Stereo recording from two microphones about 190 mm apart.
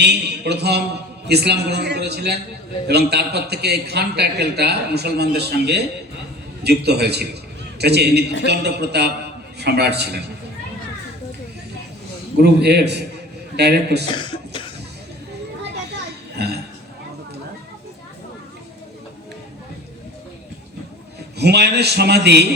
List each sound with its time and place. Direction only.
0.0 s a man's voice: 60° right (ahead or behind)
12.4 s a man's voice: 60° right (ahead or behind)
14.1 s speech: 25° left (ahead or behind)
16.4 s a man's voice: 60° right (ahead or behind)
21.3 s a man's voice: 60° right (ahead or behind)